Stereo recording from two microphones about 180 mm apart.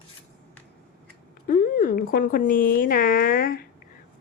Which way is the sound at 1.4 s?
50° left (ahead or behind).